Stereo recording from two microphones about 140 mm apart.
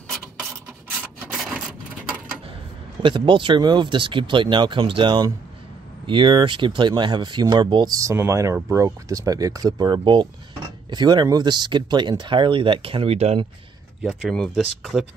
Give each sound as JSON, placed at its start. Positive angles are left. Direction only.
{"t": 1.3, "sound": "a sound", "side_deg": 0}
{"t": 3.0, "sound": "speech", "side_deg": -35}
{"t": 14.0, "sound": "speech", "side_deg": 0}